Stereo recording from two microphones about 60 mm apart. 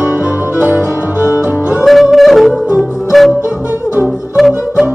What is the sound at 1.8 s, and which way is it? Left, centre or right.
Yodeling, centre.